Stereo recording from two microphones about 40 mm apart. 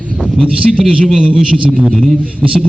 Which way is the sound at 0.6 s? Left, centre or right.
Centre.